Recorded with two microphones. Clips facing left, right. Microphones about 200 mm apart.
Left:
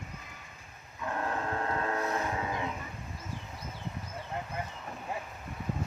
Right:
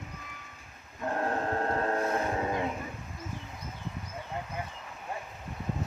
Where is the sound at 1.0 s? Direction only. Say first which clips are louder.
Right 3 dB; 45° right (ahead or behind).